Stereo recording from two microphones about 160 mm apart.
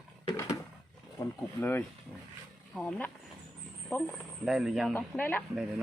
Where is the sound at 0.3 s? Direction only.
20° left (ahead or behind).